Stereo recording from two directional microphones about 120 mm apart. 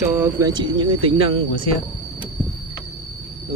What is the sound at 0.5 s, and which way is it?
Speech, 40° right (ahead or behind).